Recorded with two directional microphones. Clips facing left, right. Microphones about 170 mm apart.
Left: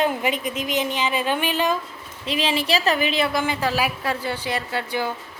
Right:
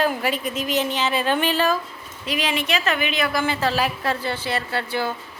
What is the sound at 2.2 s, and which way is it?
A woman's voice, 30° left (ahead or behind).